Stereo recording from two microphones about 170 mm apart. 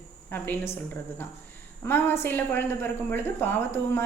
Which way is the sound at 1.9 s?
15° left (ahead or behind).